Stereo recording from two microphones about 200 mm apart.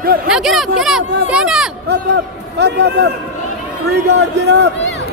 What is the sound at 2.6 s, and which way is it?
Speech, 55° right (ahead or behind).